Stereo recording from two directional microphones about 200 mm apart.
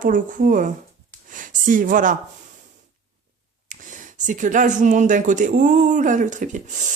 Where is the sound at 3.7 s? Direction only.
40° right (ahead or behind).